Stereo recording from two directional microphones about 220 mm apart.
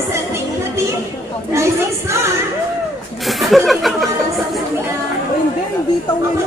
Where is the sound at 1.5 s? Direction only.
15° right (ahead or behind).